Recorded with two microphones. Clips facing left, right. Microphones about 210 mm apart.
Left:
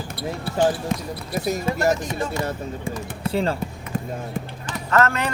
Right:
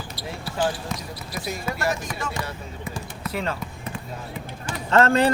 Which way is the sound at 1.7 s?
30° left (ahead or behind).